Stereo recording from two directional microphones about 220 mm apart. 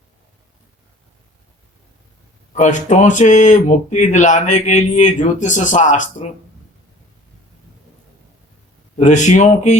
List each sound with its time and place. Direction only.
2.5 s speech: 35° left (ahead or behind)
9.0 s speech: 35° left (ahead or behind)